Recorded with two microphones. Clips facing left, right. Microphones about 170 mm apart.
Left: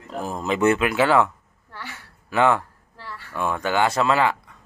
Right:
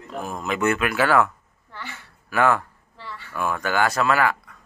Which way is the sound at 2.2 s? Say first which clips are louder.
Left 1 dB; 20° left (ahead or behind).